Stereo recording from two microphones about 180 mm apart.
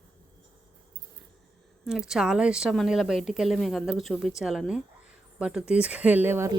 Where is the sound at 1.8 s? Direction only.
5° right (ahead or behind).